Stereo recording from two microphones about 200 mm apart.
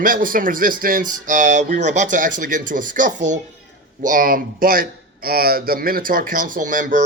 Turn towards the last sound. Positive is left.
turn(degrees=-40)  # may be behind; listen again after turning